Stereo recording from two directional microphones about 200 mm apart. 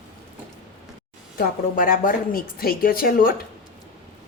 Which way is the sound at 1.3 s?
45° left (ahead or behind).